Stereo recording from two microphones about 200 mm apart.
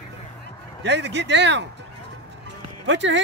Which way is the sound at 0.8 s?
60° right (ahead or behind).